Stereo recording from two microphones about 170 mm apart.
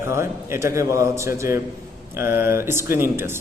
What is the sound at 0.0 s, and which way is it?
A man's voice, 15° right (ahead or behind).